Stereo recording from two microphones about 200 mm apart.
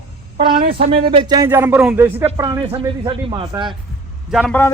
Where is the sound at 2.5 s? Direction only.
30° right (ahead or behind).